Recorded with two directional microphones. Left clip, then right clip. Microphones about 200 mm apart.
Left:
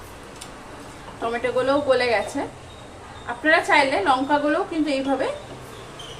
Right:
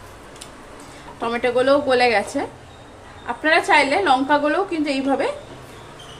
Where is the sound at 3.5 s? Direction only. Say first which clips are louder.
Right 2 dB; 50° right (ahead or behind).